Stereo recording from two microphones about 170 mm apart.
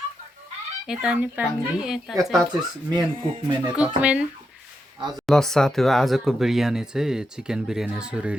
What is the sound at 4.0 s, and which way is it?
Speech, 10° right (ahead or behind).